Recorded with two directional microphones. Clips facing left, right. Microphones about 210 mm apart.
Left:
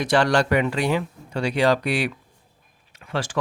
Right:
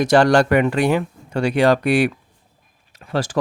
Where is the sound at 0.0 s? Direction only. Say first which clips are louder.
Right 6 dB; 45° right (ahead or behind).